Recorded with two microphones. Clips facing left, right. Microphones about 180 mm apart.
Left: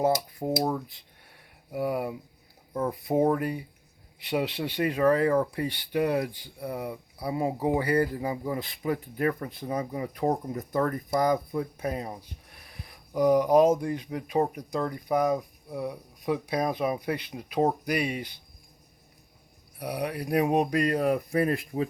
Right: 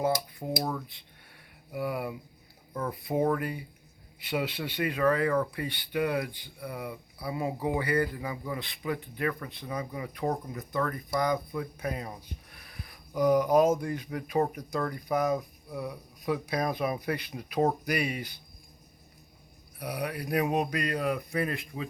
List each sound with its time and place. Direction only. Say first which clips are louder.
0.6 s speech: left 5 dB; 35° left (ahead or behind)
3.2 s speech: left 3 dB; 25° left (ahead or behind)
4.3 s speech: left 3 dB; 35° left (ahead or behind); by 16.7 s 10° left (ahead or behind)
17.2 s speech: left 2 dB; 25° left (ahead or behind)
19.8 s speech: left 3 dB; 30° left (ahead or behind)